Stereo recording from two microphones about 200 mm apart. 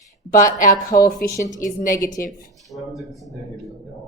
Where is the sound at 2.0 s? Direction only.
15° left (ahead or behind).